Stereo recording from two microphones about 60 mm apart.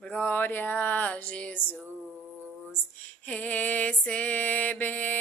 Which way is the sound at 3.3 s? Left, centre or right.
Left.